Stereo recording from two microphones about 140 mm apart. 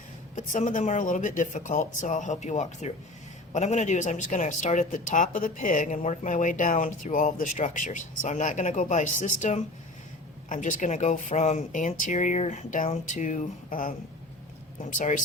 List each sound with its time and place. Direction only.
0.3 s speech: 60° left (ahead or behind); by 13.9 s 80° left
14.9 s speech: 65° left (ahead or behind)